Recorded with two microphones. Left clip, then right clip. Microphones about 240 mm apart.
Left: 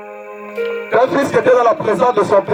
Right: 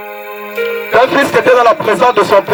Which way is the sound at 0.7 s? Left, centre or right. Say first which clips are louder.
Right 4 dB; centre.